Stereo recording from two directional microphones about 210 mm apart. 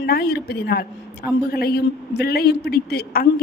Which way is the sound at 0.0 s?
50° left (ahead or behind).